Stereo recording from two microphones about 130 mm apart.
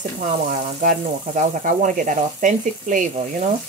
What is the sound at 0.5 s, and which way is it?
Frying, 75° right (ahead or behind).